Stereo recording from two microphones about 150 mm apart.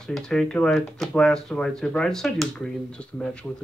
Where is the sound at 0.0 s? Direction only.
5° left (ahead or behind).